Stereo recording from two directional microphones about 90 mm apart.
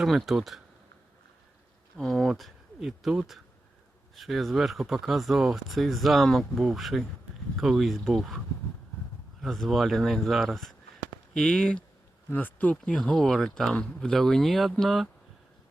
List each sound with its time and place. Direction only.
0.0 s speech: centre (ahead or behind)
2.0 s speech: 5° left (ahead or behind)
9.4 s speech: centre (ahead or behind)
12.3 s speech: 20° left (ahead or behind); by 15.1 s centre (ahead or behind)